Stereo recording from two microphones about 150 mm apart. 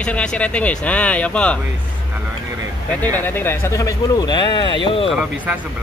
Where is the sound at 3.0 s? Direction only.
15° left (ahead or behind); by 5.1 s 35° left (ahead or behind).